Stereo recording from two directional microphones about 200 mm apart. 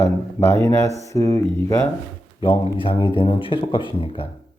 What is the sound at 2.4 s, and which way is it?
Speech, 25° left (ahead or behind).